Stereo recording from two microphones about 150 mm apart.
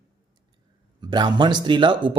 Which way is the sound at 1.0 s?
30° right (ahead or behind).